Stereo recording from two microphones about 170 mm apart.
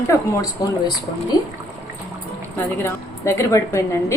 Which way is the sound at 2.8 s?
15° left (ahead or behind).